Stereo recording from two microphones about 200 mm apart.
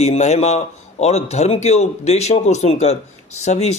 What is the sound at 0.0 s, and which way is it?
A man's voice, 35° left (ahead or behind).